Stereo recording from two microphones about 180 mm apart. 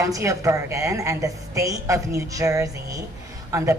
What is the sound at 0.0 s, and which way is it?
Speech, 15° right (ahead or behind).